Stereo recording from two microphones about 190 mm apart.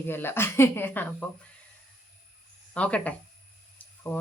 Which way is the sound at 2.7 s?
5° left (ahead or behind).